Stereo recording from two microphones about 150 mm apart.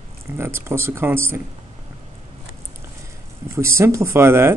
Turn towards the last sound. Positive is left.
turn(degrees=-15)  # may be behind; listen again after turning